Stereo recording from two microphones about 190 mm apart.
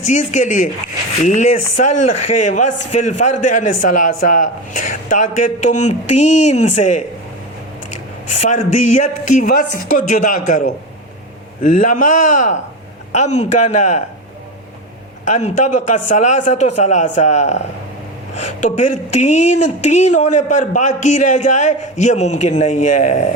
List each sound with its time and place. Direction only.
0.0 s speech: 40° left (ahead or behind)
8.3 s speech: 40° left (ahead or behind)
15.2 s speech: 40° left (ahead or behind)